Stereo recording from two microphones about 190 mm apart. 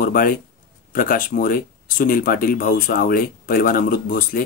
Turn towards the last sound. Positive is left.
turn(degrees=50)  # may be behind; listen again after turning